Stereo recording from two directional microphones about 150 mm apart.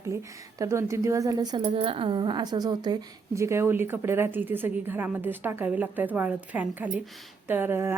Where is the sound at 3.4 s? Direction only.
20° right (ahead or behind).